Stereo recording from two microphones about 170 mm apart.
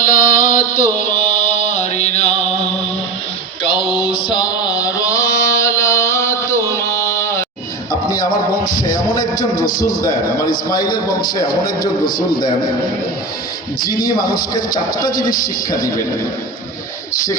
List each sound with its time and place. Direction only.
0.1 s music: 55° left (ahead or behind); by 2.7 s 40° left (ahead or behind)
3.6 s mantra: 30° left (ahead or behind)
7.9 s a sound: 20° left (ahead or behind)
8.3 s music: 50° left (ahead or behind)
8.8 s a man's voice: 25° left (ahead or behind)
9.6 s a man's voice: 50° left (ahead or behind)
10.0 s a man's voice: 20° left (ahead or behind)
13.9 s a man's voice: 25° left (ahead or behind)